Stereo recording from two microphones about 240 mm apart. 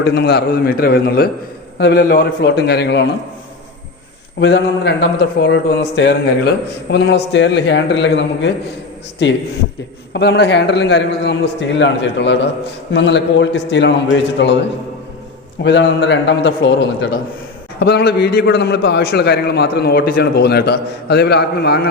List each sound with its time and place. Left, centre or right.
0.0 s a man's voice: left
4.4 s a man's voice: left
10.1 s a man's voice: left
15.6 s a man's voice: left